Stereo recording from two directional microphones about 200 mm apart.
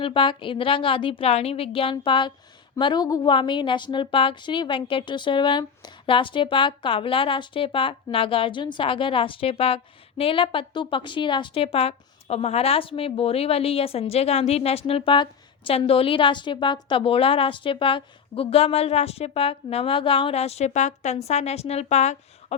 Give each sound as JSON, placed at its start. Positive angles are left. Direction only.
{"t": 0.0, "sound": "speech", "side_deg": 25}